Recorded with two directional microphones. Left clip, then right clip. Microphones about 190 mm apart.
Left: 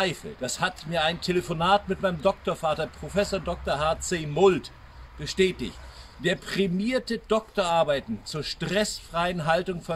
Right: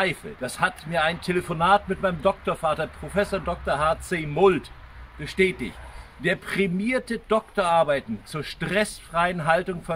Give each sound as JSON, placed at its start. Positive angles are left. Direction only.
{"t": 0.4, "sound": "a man's voice", "side_deg": 15}